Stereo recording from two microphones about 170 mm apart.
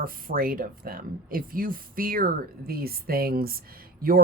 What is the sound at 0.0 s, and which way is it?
Speech, 55° right (ahead or behind).